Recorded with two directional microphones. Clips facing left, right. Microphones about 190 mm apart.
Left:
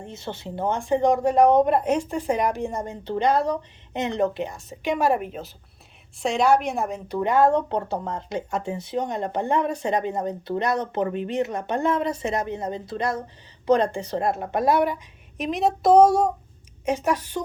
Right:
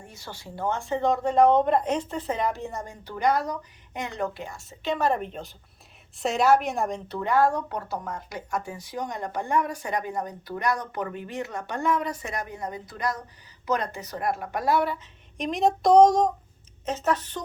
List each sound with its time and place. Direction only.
0.0 s a woman's voice: 25° left (ahead or behind); by 7.2 s 5° left (ahead or behind)
7.2 s speech: 20° left (ahead or behind)
15.4 s a woman's voice: centre (ahead or behind)